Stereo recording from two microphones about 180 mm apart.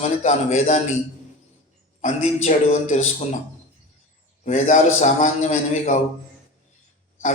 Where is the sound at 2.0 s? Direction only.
40° left (ahead or behind).